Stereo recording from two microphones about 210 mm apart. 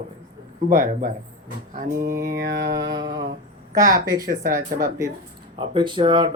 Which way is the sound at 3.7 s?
15° right (ahead or behind).